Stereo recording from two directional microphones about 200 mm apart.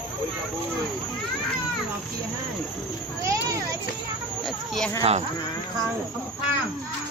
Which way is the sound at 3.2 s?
15° right (ahead or behind).